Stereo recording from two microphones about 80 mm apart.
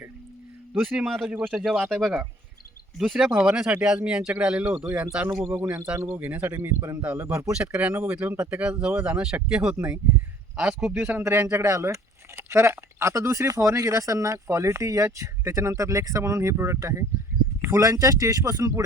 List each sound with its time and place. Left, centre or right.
0.8 s a man's voice: centre
5.4 s speech: right
7.0 s speech: centre
10.8 s a man's voice: centre
11.2 s speech: right